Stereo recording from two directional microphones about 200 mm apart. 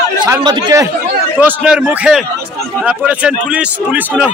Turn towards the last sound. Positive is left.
turn(degrees=-5)  # may be behind; listen again after turning